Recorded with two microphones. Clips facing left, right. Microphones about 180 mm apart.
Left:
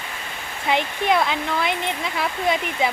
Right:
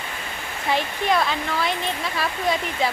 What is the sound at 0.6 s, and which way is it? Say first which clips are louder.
Speech: left 2 dB; 20° left (ahead or behind).